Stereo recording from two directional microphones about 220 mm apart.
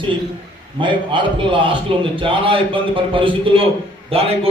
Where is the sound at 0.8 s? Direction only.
20° right (ahead or behind).